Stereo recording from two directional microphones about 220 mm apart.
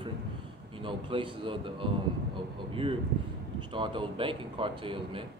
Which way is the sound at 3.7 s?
20° right (ahead or behind).